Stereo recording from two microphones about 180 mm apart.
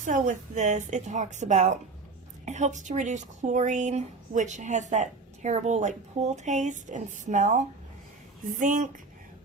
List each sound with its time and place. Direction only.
0.0 s a woman's voice: 45° right (ahead or behind)